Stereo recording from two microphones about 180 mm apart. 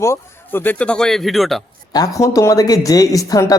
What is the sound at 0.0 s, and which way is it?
Speech, 15° left (ahead or behind).